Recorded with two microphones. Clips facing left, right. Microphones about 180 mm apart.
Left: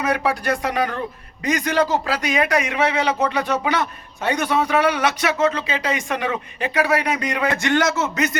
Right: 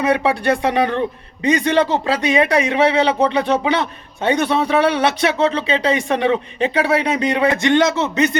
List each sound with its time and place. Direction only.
0.0 s speech: 25° right (ahead or behind)
7.5 s speech: 20° right (ahead or behind)